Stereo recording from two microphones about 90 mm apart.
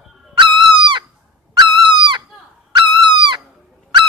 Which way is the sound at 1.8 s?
65° right (ahead or behind).